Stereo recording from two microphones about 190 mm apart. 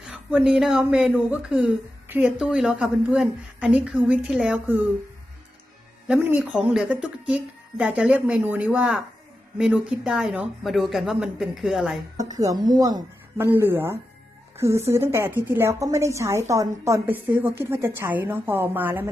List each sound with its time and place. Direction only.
0.0 s speech: 5° right (ahead or behind)
6.1 s a woman's voice: 10° right (ahead or behind)
12.1 s a woman's voice: 20° right (ahead or behind)